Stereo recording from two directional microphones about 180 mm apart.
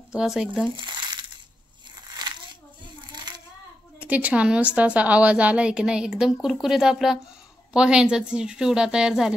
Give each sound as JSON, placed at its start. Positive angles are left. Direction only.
{"t": 0.1, "sound": "a woman's voice", "side_deg": -5}
{"t": 0.7, "sound": "crumpling", "side_deg": -25}
{"t": 3.1, "sound": "child singing", "side_deg": -25}
{"t": 4.0, "sound": "a woman's voice", "side_deg": -10}